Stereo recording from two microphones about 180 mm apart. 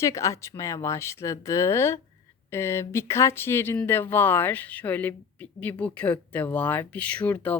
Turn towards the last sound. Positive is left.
turn(degrees=10)  # may be behind; listen again after turning